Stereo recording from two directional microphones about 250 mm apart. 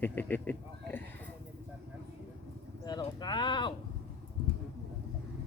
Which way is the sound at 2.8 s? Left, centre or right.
Centre.